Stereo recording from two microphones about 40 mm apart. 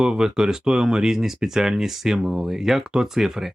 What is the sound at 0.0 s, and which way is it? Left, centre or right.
Speech, centre.